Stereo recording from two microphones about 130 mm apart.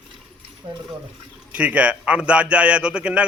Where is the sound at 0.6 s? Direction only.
40° right (ahead or behind).